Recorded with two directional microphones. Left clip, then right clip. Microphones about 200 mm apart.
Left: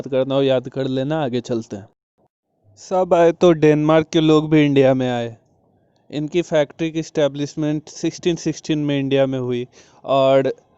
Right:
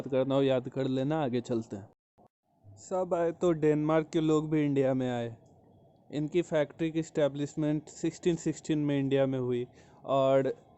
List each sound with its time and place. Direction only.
0.0 s speech: 35° left (ahead or behind)
2.8 s a man's voice: 40° left (ahead or behind)